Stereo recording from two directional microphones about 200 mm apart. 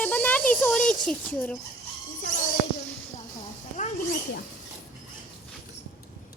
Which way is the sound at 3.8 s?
40° left (ahead or behind).